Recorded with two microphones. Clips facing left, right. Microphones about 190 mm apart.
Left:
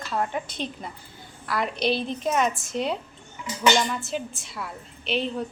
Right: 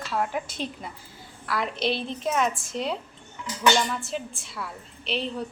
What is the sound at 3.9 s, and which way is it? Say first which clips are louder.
A woman's voice: left 2 dB; centre (ahead or behind).